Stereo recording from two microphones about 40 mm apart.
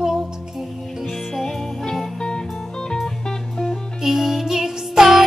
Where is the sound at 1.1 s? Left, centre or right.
Centre.